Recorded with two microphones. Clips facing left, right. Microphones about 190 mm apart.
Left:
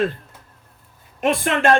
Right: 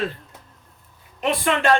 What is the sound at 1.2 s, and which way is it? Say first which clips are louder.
Speech: left 2 dB; 50° left (ahead or behind).